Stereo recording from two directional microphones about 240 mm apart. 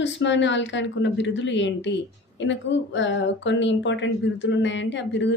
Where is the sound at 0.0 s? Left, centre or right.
Left.